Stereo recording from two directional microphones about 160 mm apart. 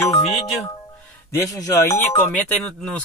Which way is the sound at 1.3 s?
20° left (ahead or behind).